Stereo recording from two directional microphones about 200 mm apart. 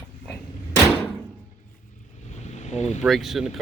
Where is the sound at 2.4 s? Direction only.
35° left (ahead or behind).